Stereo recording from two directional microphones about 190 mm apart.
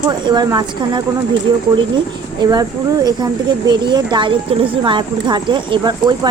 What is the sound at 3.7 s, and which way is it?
Speech, 20° right (ahead or behind).